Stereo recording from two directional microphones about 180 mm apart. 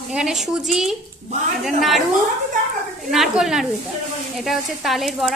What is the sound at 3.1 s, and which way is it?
A woman's voice, centre (ahead or behind).